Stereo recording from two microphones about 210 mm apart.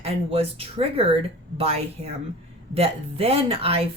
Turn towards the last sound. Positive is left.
turn(degrees=-25)  # may be behind; listen again after turning